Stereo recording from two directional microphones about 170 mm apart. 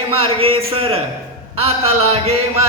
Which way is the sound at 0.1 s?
35° right (ahead or behind).